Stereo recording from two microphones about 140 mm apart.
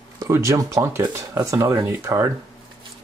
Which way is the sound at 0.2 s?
20° right (ahead or behind).